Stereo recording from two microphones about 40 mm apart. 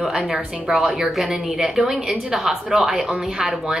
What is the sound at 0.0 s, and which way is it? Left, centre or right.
A woman's voice, centre.